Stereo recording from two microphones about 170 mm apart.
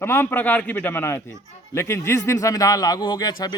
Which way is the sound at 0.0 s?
15° left (ahead or behind).